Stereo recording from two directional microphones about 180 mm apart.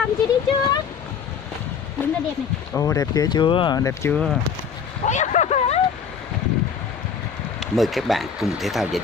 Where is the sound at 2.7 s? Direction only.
20° left (ahead or behind).